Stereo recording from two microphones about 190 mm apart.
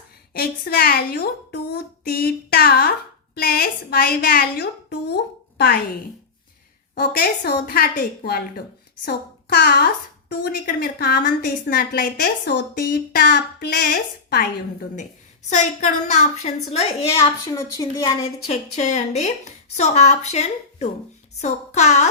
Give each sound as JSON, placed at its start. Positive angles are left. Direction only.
{"t": 0.3, "sound": "a woman's voice", "side_deg": 55}
{"t": 7.0, "sound": "a child's voice", "side_deg": 55}
{"t": 15.4, "sound": "a woman's voice", "side_deg": 40}
{"t": 17.2, "sound": "a woman's voice", "side_deg": 15}
{"t": 18.3, "sound": "a woman's voice", "side_deg": 35}